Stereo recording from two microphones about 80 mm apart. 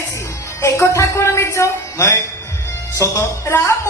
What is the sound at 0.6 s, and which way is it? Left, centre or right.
A woman's voice, left.